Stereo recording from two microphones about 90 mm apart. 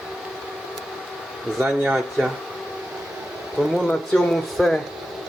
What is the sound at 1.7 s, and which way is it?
Speech, 10° right (ahead or behind).